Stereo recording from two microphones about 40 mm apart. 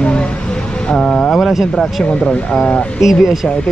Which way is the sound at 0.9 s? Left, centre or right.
Left.